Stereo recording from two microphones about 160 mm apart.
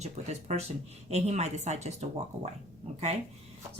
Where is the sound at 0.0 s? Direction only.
45° right (ahead or behind).